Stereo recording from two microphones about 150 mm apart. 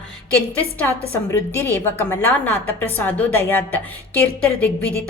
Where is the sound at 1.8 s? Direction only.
15° left (ahead or behind).